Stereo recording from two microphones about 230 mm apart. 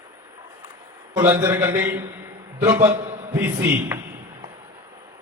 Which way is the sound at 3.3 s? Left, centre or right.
Centre.